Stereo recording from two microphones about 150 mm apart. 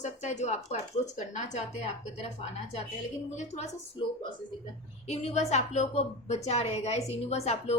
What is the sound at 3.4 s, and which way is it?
Speech, 50° left (ahead or behind).